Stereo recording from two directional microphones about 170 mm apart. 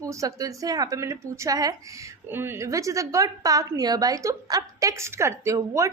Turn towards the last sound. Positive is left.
turn(degrees=-20)  # may be behind; listen again after turning